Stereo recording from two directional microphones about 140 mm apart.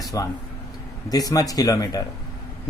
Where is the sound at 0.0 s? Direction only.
25° left (ahead or behind).